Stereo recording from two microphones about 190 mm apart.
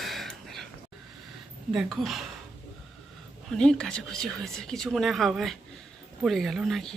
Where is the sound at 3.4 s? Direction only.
5° left (ahead or behind).